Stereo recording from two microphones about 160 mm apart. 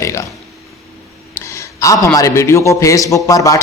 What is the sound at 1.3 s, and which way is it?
A man's voice, 15° left (ahead or behind).